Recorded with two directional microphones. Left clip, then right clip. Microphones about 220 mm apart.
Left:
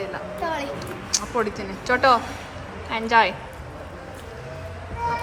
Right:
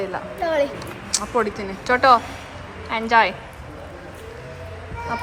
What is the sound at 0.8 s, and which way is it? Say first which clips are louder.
Speech: even; 10° left (ahead or behind).